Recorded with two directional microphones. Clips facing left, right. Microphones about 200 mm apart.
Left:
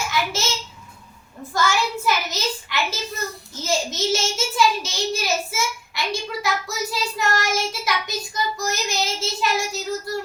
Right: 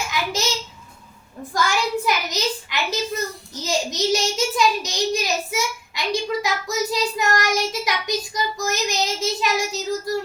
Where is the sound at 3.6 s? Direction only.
15° right (ahead or behind).